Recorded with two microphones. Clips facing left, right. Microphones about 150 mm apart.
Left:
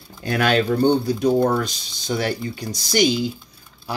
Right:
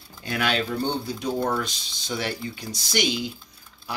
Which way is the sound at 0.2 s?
45° left (ahead or behind).